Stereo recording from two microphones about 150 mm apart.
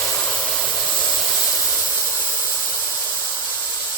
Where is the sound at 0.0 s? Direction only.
15° left (ahead or behind).